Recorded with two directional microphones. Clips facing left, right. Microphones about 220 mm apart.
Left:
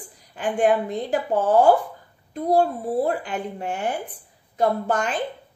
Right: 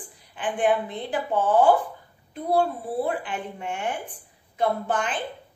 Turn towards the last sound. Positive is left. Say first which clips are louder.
# left 3 dB
turn(degrees=40)  # may be behind; listen again after turning